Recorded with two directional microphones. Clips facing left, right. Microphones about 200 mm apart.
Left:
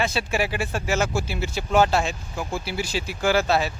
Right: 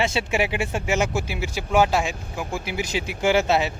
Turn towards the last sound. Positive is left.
turn(degrees=-20)  # may be behind; listen again after turning